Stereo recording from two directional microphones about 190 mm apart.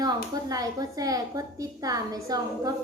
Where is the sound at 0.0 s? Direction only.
20° right (ahead or behind).